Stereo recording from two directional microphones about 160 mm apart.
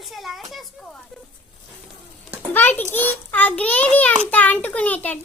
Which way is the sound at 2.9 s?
10° left (ahead or behind).